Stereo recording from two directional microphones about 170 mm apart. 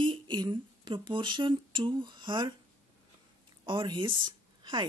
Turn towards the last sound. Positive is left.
turn(degrees=-30)  # may be behind; listen again after turning